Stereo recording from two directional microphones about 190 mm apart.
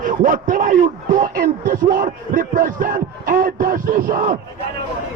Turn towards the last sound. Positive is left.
turn(degrees=-45)  # may be behind; listen again after turning